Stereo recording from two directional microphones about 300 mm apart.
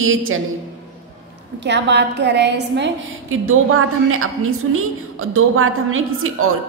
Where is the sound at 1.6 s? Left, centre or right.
Right.